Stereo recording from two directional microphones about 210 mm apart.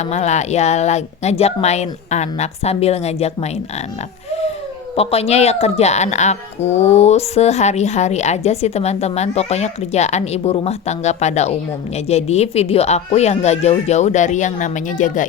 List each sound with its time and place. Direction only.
0.0 s a woman's voice: 30° left (ahead or behind)
4.9 s a woman's voice: 30° left (ahead or behind)